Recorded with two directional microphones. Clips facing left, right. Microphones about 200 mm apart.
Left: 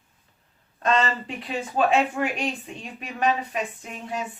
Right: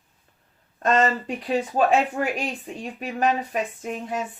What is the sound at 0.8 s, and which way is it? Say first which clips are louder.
Speech: right 3 dB; 45° right (ahead or behind).